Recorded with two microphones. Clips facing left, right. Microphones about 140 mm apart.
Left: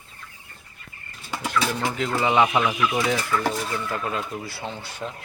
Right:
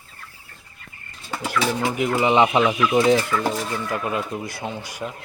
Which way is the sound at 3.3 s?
15° right (ahead or behind).